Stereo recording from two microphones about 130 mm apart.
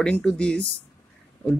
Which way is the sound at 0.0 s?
5° left (ahead or behind).